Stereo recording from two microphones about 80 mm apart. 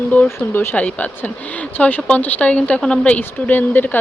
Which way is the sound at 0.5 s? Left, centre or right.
Left.